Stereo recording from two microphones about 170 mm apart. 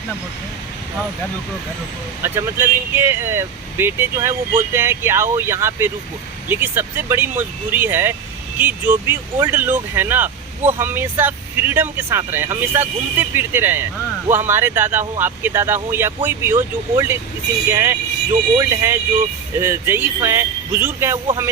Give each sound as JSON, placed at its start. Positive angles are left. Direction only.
{"t": 2.2, "sound": "speech", "side_deg": -15}